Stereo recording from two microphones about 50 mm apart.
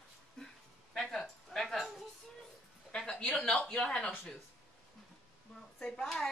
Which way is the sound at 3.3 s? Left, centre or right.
Centre.